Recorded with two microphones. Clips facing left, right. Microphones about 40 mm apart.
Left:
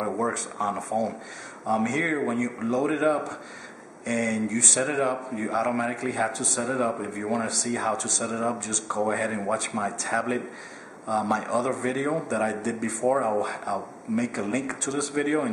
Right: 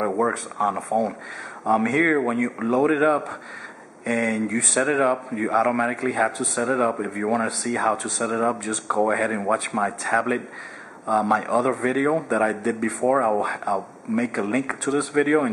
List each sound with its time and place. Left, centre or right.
0.0 s speech: centre